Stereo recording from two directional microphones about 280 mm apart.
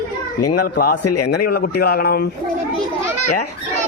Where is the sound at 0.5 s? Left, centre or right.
Left.